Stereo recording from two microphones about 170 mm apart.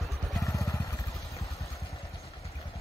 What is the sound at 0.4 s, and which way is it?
Vehicle, 20° left (ahead or behind).